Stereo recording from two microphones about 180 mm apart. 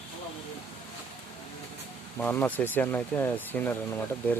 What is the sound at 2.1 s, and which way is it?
Speech, 10° left (ahead or behind).